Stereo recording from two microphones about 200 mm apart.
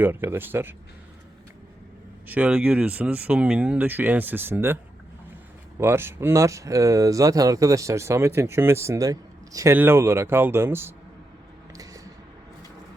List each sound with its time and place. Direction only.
0.0 s speech: 10° right (ahead or behind)
2.2 s speech: 5° right (ahead or behind)
5.8 s speech: 10° right (ahead or behind)
11.7 s a sound: 15° right (ahead or behind)